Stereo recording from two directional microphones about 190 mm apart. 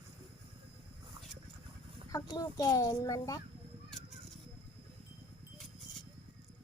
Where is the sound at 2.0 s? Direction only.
20° left (ahead or behind).